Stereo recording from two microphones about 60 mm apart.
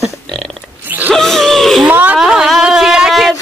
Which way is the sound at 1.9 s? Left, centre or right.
Right.